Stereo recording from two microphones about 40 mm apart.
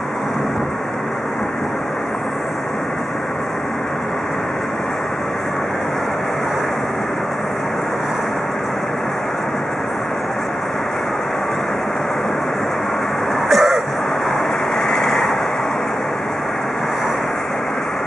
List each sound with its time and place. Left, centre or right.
13.5 s vehicle: centre
14.9 s vehicle: centre